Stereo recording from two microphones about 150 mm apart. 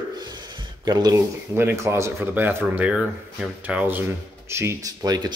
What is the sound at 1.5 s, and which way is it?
Speech, 15° right (ahead or behind).